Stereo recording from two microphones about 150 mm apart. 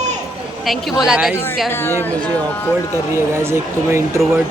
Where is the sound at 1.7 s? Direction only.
15° left (ahead or behind).